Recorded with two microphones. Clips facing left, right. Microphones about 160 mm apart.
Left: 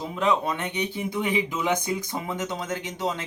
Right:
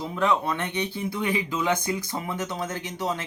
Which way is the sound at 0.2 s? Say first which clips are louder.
Even; 20° left (ahead or behind).